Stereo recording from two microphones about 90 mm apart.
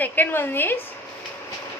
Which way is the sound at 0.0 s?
20° left (ahead or behind).